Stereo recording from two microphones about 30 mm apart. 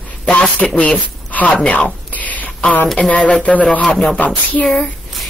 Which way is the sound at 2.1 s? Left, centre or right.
Left.